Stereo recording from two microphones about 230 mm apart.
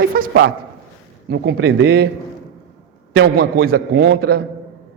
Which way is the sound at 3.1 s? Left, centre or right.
Right.